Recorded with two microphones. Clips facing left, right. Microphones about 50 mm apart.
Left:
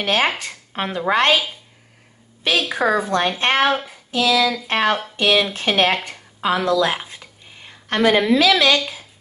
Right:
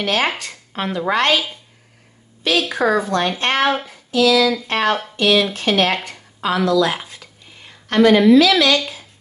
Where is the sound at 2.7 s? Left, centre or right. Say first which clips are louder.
Right 1 dB; centre.